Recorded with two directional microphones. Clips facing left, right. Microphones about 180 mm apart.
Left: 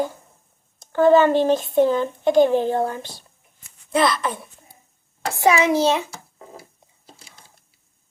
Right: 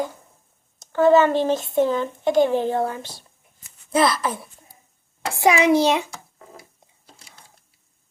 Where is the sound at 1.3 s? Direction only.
25° left (ahead or behind).